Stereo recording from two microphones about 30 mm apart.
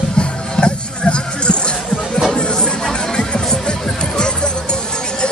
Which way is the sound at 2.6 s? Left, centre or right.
Left.